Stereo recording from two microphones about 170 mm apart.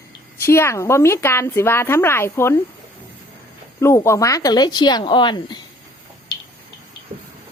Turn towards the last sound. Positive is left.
turn(degrees=25)  # may be behind; listen again after turning